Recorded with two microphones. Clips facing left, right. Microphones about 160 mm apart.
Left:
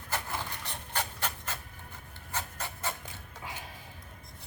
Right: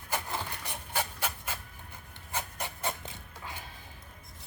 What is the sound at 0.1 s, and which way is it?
Rub, 10° right (ahead or behind).